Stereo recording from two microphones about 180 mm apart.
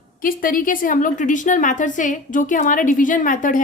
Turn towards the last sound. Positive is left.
turn(degrees=45)  # may be behind; listen again after turning